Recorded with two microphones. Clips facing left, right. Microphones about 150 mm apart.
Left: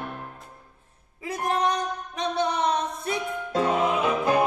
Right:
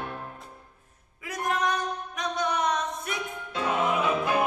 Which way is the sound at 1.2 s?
30° left (ahead or behind).